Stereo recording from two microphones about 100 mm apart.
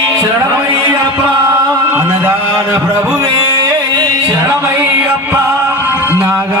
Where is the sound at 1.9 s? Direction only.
20° right (ahead or behind).